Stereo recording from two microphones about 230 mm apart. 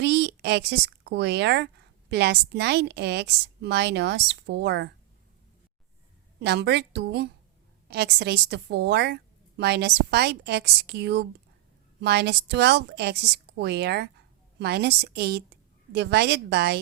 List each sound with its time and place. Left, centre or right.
0.0 s a woman's voice: right
6.4 s a woman's voice: right